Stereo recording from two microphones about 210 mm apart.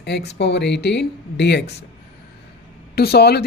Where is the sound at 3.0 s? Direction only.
50° left (ahead or behind).